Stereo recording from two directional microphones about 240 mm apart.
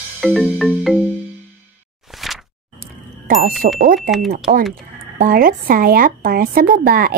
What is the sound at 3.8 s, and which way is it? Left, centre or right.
Speech, right.